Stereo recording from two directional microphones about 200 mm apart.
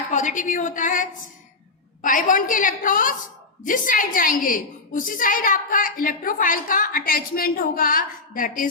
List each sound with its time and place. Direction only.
0.1 s a woman's voice: 40° left (ahead or behind)